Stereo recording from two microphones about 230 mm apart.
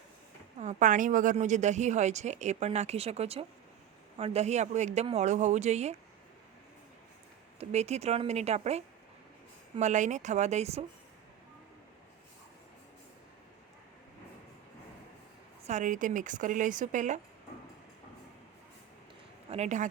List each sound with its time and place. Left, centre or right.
0.6 s speech: right
7.6 s speech: right
15.6 s speech: right
19.5 s speech: right